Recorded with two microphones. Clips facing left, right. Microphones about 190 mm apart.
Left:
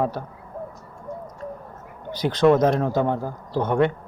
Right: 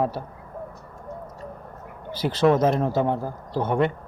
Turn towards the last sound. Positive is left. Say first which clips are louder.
# left 2 dB
turn(degrees=-5)  # may be behind; listen again after turning